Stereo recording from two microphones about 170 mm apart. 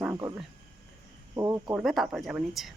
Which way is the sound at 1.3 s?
15° right (ahead or behind).